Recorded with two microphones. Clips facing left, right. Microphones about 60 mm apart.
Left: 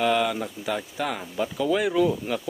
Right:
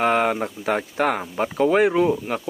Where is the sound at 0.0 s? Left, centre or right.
Right.